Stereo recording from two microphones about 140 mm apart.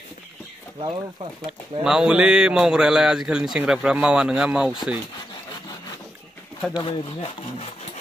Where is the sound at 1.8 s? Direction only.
5° right (ahead or behind).